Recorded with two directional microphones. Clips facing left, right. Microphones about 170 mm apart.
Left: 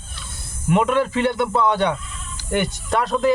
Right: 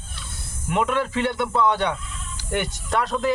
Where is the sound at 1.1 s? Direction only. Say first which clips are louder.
Left 3 dB; 40° left (ahead or behind).